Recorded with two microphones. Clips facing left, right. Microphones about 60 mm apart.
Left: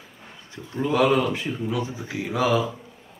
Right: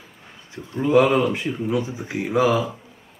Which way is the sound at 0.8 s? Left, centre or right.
Right.